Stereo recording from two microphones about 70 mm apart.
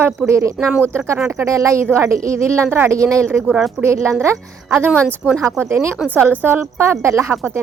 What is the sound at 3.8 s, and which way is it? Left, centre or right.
A woman's voice, right.